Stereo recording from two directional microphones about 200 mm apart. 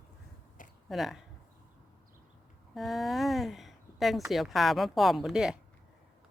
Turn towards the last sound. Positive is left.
turn(degrees=0)  # may be behind; listen again after turning